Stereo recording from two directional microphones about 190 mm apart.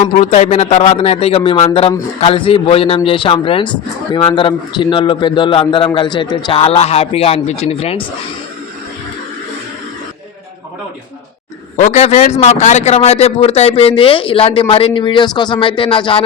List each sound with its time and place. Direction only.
0.0 s a man's voice: 35° left (ahead or behind)
11.8 s a man's voice: 35° left (ahead or behind)